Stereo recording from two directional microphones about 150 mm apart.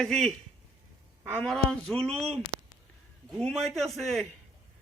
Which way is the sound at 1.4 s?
5° left (ahead or behind).